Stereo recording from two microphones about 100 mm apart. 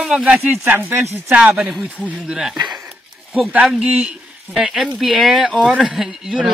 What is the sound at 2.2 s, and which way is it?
Speech, 5° right (ahead or behind).